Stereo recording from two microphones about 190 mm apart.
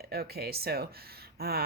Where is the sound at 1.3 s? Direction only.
55° right (ahead or behind).